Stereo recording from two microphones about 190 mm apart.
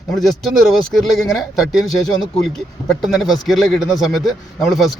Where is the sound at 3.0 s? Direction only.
Centre (ahead or behind).